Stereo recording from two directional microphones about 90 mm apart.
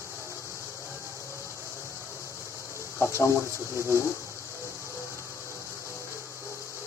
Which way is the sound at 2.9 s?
30° left (ahead or behind).